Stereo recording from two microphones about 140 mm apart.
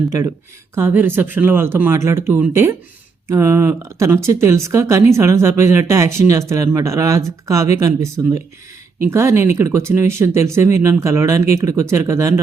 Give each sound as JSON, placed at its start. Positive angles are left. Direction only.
{"t": 0.8, "sound": "speech", "side_deg": -15}